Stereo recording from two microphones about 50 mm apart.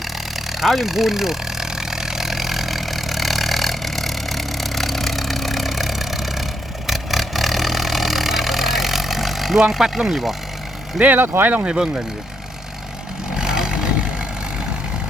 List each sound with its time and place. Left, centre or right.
0.5 s vehicle: centre
11.0 s speech: right
11.6 s speech: centre
13.3 s vehicle: centre